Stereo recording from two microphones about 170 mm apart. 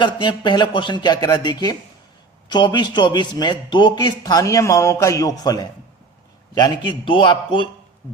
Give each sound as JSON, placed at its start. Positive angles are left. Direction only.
{"t": 0.0, "sound": "a man's voice", "side_deg": 30}